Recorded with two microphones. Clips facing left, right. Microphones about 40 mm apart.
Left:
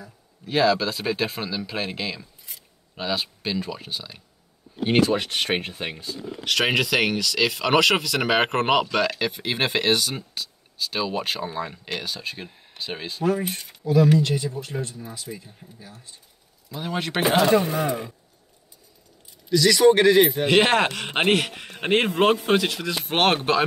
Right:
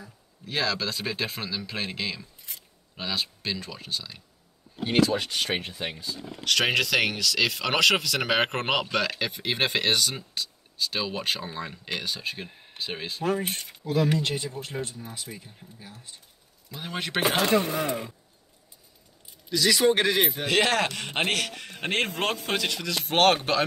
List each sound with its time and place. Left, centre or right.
0.5 s speech: centre
4.7 s a man's voice: left
5.1 s speech: left
6.4 s speech: centre
13.2 s speech: right
16.7 s speech: centre
17.6 s a man's voice: left
19.5 s speech: centre
20.4 s speech: left